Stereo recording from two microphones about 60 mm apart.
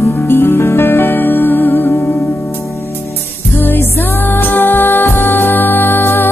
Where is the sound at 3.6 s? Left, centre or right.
Left.